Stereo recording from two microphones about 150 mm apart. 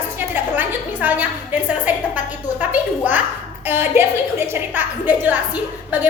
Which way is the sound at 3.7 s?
15° right (ahead or behind).